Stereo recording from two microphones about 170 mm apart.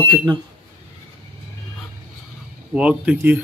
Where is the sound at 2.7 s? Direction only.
5° right (ahead or behind).